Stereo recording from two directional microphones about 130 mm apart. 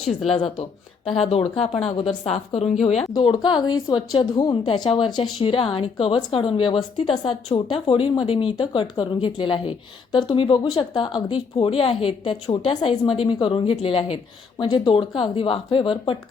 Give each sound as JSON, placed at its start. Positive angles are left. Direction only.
{"t": 0.3, "sound": "a woman's voice", "side_deg": 45}
{"t": 3.2, "sound": "speech", "side_deg": 35}